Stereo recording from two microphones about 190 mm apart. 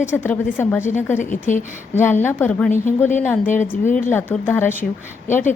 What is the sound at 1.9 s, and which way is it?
A woman's voice, 10° left (ahead or behind).